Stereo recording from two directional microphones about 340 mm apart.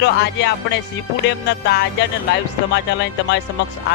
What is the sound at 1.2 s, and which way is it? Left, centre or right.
Music, left.